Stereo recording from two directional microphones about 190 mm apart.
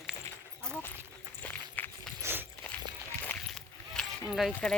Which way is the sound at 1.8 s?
10° left (ahead or behind).